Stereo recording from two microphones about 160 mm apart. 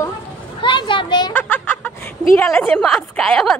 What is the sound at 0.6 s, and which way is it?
Speech, 30° left (ahead or behind).